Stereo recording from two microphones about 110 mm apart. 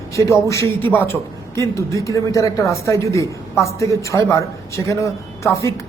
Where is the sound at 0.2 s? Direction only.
25° left (ahead or behind).